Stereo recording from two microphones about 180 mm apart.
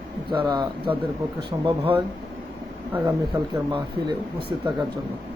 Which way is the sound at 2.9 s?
10° right (ahead or behind).